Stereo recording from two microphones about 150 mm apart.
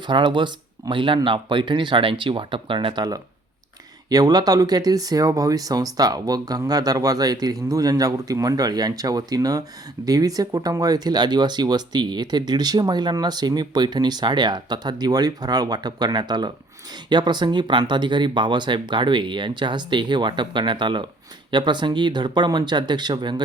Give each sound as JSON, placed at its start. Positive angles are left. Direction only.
{"t": 0.1, "sound": "speech", "side_deg": -30}